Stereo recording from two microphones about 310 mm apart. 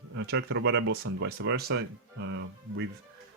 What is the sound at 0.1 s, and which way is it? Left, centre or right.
Speech, right.